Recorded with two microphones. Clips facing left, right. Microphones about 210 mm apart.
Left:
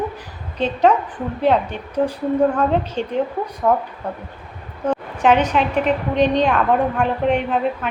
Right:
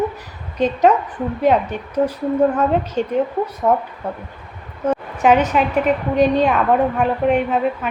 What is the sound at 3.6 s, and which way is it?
Speech, 10° right (ahead or behind).